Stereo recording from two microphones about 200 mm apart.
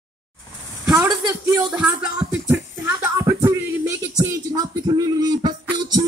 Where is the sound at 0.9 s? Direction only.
15° right (ahead or behind).